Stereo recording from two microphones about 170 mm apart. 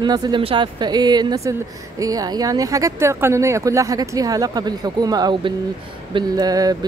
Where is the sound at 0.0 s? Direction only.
25° right (ahead or behind).